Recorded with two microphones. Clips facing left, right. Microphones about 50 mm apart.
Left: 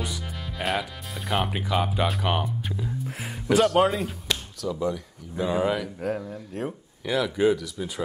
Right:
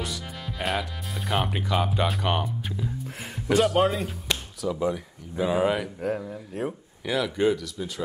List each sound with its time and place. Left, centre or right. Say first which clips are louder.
0.0 s speech: even; centre
4.3 s a sound: right 3 dB; centre
5.3 s speech: right 1 dB; centre